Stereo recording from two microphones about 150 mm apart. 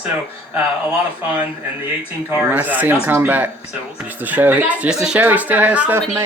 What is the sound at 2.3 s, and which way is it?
Speech, 10° right (ahead or behind).